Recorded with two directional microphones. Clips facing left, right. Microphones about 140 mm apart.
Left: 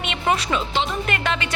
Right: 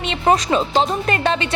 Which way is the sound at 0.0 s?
35° right (ahead or behind).